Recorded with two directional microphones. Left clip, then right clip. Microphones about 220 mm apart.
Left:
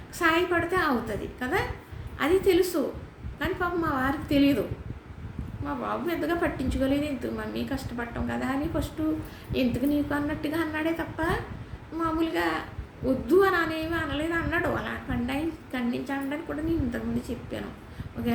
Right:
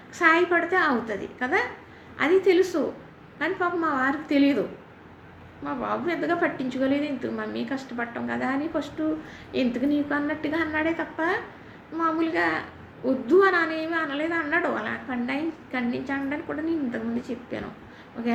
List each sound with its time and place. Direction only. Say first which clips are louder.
0.2 s a woman's voice: right 4 dB; 10° left (ahead or behind)
5.6 s a woman's voice: right 3 dB; 10° left (ahead or behind)